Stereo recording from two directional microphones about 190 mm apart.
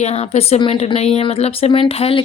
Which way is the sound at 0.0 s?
35° left (ahead or behind).